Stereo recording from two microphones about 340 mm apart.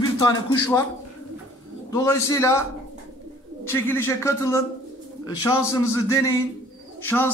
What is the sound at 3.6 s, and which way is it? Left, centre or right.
A man's voice, centre.